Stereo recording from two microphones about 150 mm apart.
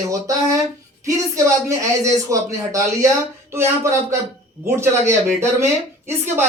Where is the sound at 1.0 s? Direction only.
20° right (ahead or behind).